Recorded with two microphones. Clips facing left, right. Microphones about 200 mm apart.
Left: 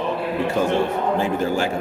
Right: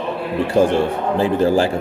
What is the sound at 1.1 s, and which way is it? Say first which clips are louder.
Speech: right 9 dB; 35° right (ahead or behind).